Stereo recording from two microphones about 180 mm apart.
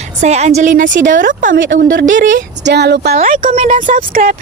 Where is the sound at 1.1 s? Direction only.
45° right (ahead or behind).